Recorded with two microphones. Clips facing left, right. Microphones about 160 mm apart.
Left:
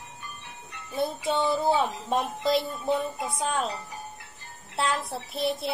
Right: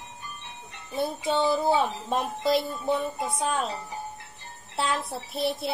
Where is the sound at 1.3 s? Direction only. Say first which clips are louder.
Right 2 dB; centre (ahead or behind).